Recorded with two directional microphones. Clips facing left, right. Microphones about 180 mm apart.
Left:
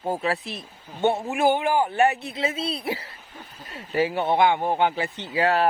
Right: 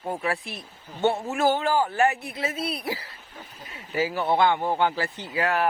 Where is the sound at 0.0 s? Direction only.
30° left (ahead or behind).